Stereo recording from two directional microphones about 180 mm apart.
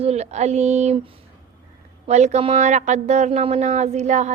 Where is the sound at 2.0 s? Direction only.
40° right (ahead or behind).